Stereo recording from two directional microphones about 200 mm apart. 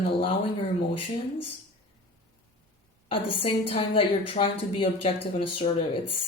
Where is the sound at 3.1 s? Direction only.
30° left (ahead or behind).